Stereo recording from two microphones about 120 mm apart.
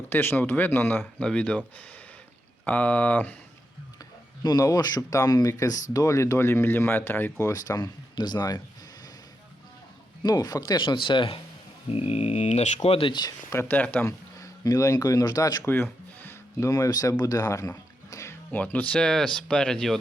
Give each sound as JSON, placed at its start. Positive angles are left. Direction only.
{"t": 0.1, "sound": "speech", "side_deg": 20}
{"t": 2.6, "sound": "speech", "side_deg": 10}
{"t": 4.4, "sound": "speech", "side_deg": 30}
{"t": 7.5, "sound": "speech", "side_deg": 35}
{"t": 10.2, "sound": "speech", "side_deg": 35}
{"t": 11.9, "sound": "speech", "side_deg": 55}
{"t": 13.5, "sound": "speech", "side_deg": 20}
{"t": 14.3, "sound": "speech", "side_deg": 30}
{"t": 15.6, "sound": "music", "side_deg": 15}
{"t": 18.6, "sound": "speech", "side_deg": 10}